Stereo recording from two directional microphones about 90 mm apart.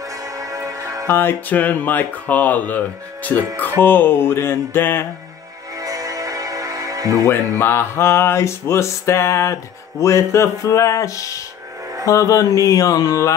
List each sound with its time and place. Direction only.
0.1 s music: 40° right (ahead or behind)
1.0 s speech: 25° left (ahead or behind)
5.8 s music: 40° right (ahead or behind)
7.2 s music: 25° left (ahead or behind)